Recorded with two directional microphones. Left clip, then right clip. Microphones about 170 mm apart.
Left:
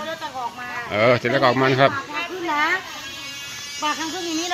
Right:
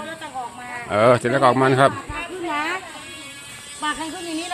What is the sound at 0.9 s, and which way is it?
Speech, 20° right (ahead or behind).